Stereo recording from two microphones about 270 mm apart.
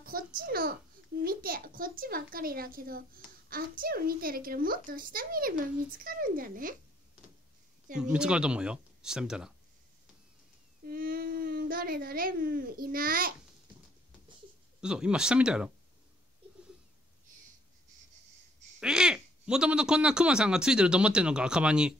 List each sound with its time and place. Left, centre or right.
0.0 s a child's voice: right
7.9 s speech: centre
10.9 s speech: right
14.8 s speech: centre
18.8 s speech: centre